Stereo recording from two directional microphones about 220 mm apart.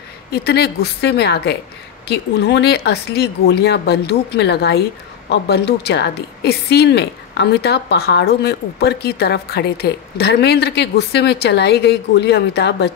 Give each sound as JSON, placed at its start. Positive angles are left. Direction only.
{"t": 0.3, "sound": "a woman's voice", "side_deg": 45}